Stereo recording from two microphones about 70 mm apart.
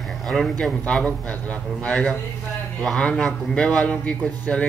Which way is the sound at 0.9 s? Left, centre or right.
Centre.